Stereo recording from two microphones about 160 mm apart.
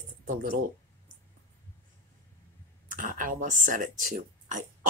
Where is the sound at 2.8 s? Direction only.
55° right (ahead or behind).